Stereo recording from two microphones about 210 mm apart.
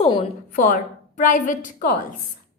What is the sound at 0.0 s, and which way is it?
A woman's voice, 30° left (ahead or behind).